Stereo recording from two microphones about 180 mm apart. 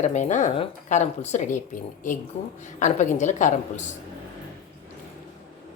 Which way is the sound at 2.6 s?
40° left (ahead or behind).